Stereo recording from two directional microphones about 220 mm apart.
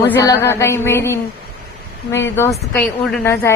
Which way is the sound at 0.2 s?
15° left (ahead or behind).